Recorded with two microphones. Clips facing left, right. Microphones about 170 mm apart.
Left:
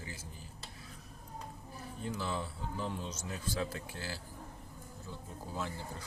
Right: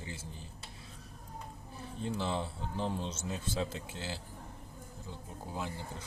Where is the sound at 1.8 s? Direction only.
25° right (ahead or behind).